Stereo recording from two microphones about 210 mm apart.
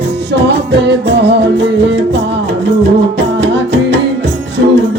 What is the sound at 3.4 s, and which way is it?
Music, 55° right (ahead or behind).